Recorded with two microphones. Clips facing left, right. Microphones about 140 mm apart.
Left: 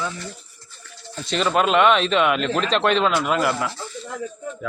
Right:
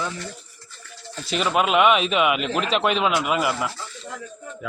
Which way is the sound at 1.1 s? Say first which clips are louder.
Left 2 dB; 5° right (ahead or behind).